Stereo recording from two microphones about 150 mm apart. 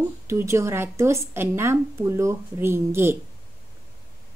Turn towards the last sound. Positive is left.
turn(degrees=-15)  # may be behind; listen again after turning